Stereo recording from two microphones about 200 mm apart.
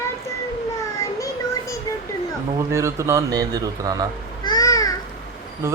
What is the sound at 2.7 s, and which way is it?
Speech, 15° right (ahead or behind).